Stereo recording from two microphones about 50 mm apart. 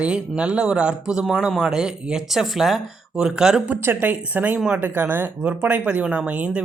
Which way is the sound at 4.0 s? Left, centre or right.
Right.